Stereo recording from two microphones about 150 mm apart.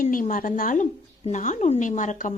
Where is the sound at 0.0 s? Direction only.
60° left (ahead or behind).